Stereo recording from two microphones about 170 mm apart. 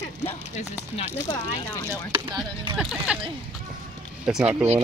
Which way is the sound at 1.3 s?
25° left (ahead or behind).